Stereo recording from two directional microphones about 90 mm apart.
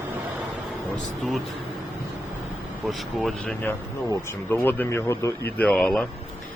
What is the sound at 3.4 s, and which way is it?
Speech, 15° left (ahead or behind).